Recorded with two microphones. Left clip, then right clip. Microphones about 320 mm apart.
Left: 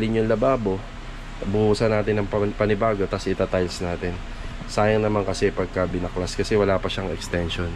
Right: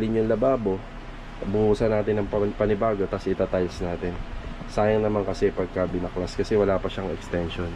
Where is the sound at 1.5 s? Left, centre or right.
Right.